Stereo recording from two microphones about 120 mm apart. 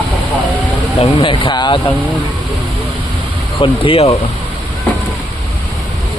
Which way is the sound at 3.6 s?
50° left (ahead or behind).